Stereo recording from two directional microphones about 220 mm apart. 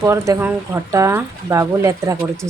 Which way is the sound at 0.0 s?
15° right (ahead or behind).